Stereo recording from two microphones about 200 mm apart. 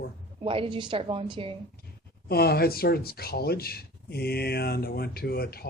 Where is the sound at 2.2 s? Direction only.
50° left (ahead or behind).